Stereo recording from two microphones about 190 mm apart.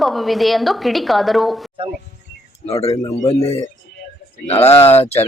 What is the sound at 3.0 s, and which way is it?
Speech, 15° left (ahead or behind).